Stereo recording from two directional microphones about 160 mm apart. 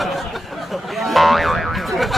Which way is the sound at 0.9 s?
Centre (ahead or behind).